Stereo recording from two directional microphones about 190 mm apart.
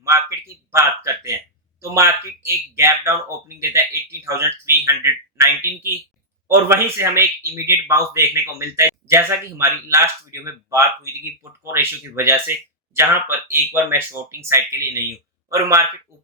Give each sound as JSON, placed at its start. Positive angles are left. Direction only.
{"t": 0.1, "sound": "a man's voice", "side_deg": -15}